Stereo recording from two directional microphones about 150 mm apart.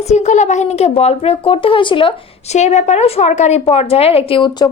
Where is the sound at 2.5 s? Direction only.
50° left (ahead or behind).